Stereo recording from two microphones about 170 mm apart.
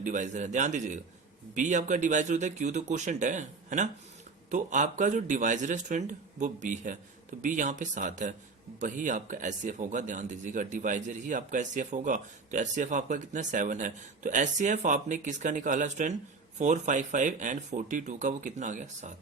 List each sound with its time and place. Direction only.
0.0 s speech: 45° right (ahead or behind)